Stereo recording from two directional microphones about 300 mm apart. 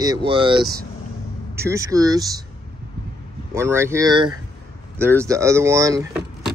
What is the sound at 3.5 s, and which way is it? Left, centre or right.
Speech, centre.